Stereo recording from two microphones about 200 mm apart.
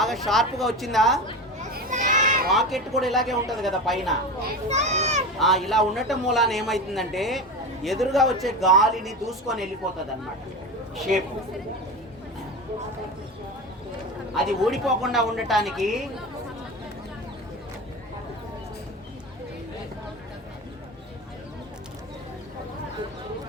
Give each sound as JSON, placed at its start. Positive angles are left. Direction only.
{"t": 0.0, "sound": "a man's voice", "side_deg": 0}
{"t": 1.5, "sound": "children playing", "side_deg": -40}
{"t": 2.5, "sound": "a man's voice", "side_deg": 0}
{"t": 4.7, "sound": "a child's voice", "side_deg": -35}
{"t": 5.4, "sound": "a man's voice", "side_deg": 0}
{"t": 10.9, "sound": "a man's voice", "side_deg": 0}
{"t": 14.3, "sound": "a man's voice", "side_deg": 0}